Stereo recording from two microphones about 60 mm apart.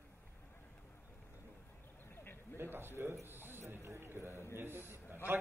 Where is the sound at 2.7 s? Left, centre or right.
Right.